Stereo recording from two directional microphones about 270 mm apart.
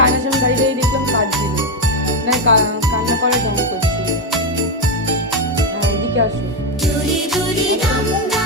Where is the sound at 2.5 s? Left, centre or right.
Right.